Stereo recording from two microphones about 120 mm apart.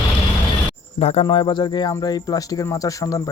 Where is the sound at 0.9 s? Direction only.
55° left (ahead or behind).